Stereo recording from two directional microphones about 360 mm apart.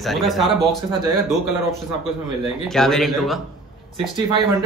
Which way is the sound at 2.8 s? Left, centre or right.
Centre.